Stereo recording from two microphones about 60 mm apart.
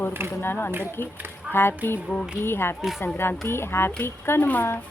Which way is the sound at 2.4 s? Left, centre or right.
Left.